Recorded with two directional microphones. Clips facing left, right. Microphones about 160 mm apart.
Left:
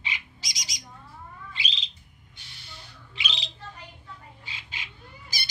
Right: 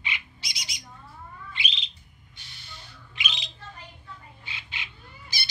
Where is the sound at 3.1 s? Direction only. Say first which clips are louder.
Even; 30° left (ahead or behind).